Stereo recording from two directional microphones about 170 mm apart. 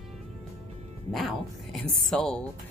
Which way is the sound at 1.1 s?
Centre (ahead or behind).